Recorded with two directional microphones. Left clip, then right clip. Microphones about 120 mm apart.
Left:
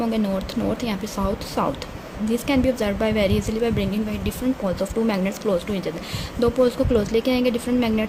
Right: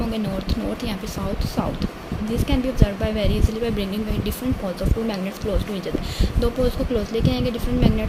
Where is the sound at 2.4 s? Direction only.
55° left (ahead or behind).